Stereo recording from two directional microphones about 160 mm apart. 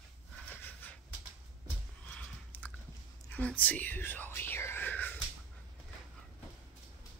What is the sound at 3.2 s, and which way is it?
Whispering, 10° left (ahead or behind).